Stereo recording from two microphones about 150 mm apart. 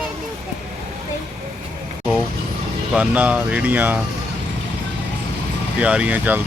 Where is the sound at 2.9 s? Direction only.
10° right (ahead or behind).